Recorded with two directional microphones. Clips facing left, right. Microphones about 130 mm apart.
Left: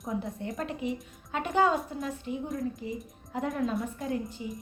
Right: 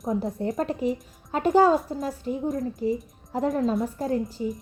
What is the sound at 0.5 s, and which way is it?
A woman's voice, 40° right (ahead or behind).